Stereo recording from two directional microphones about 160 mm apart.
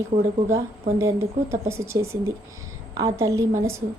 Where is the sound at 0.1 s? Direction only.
40° right (ahead or behind).